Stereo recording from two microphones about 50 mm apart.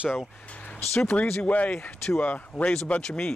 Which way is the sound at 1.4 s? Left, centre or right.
Left.